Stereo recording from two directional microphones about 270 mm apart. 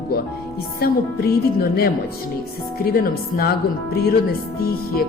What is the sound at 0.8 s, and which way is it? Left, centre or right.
A woman's voice, left.